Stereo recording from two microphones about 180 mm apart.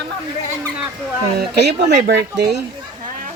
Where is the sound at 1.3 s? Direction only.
65° right (ahead or behind).